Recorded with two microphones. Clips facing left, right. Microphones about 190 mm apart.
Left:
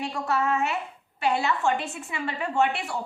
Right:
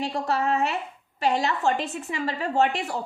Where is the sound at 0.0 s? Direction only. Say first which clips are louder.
Right 1 dB; 30° right (ahead or behind).